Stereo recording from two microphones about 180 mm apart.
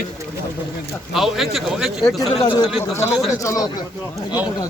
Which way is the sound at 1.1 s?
Centre (ahead or behind).